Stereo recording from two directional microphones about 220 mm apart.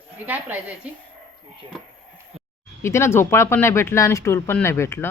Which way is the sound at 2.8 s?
10° left (ahead or behind).